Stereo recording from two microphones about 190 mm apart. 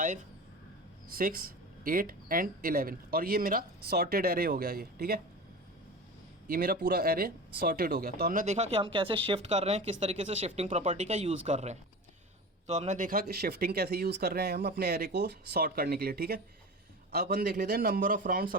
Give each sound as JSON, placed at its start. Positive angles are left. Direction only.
{"t": 1.1, "sound": "speech", "side_deg": -50}
{"t": 6.5, "sound": "speech", "side_deg": -50}